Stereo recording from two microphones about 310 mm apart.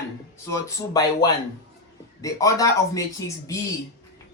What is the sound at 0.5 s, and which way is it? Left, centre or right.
Speech, centre.